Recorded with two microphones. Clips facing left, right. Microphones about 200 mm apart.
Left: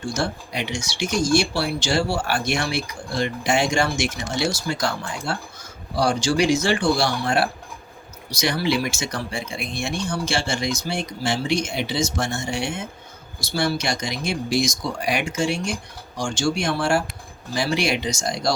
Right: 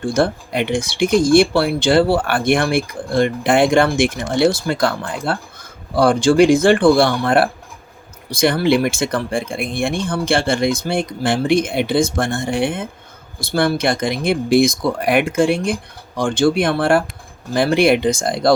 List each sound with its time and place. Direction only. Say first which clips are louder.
0.0 s speech: right 8 dB; 55° right (ahead or behind)